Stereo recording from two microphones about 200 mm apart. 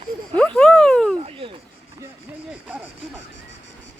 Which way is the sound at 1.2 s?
25° right (ahead or behind).